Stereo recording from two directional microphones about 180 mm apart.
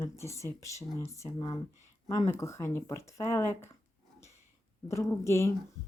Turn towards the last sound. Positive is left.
turn(degrees=15)  # may be behind; listen again after turning